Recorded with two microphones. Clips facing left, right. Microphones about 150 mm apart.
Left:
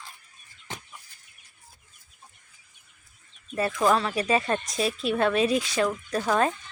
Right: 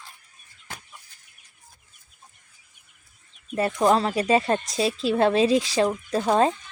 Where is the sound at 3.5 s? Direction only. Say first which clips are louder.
Right 3 dB; 25° right (ahead or behind).